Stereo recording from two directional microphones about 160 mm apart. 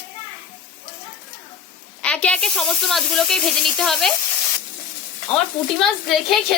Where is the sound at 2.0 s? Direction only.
5° left (ahead or behind).